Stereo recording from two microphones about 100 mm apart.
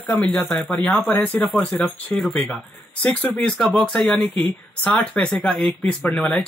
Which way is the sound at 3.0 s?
15° left (ahead or behind).